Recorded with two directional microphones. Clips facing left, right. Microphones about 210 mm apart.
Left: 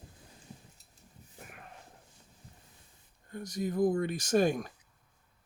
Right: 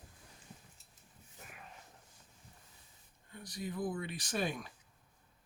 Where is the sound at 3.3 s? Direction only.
45° left (ahead or behind).